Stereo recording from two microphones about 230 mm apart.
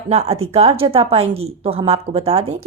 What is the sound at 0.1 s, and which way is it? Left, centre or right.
A woman's voice, right.